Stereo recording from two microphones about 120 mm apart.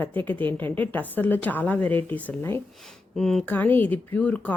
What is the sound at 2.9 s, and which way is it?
Speech, 5° left (ahead or behind).